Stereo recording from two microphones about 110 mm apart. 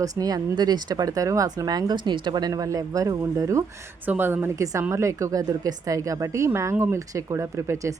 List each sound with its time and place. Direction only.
0.0 s speech: 35° right (ahead or behind)
4.0 s a woman's voice: 20° right (ahead or behind)